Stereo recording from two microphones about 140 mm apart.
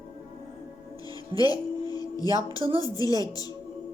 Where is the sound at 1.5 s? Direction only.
30° left (ahead or behind).